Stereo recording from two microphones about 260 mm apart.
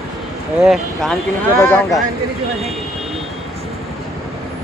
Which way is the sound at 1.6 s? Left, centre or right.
Centre.